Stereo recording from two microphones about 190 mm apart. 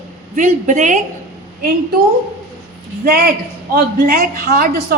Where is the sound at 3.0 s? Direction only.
50° right (ahead or behind).